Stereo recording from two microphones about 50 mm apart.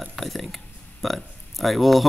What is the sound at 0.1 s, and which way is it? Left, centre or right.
A man's voice, centre.